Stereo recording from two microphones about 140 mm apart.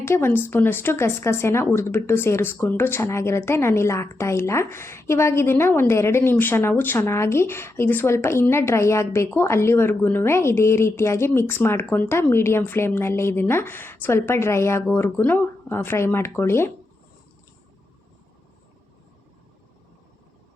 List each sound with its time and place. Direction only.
0.0 s speech: 15° left (ahead or behind)